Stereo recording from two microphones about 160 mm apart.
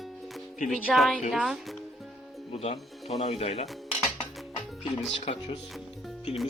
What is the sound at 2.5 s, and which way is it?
Speech, 40° left (ahead or behind).